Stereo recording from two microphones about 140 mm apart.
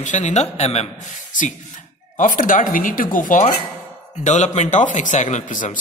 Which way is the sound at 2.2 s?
70° left (ahead or behind).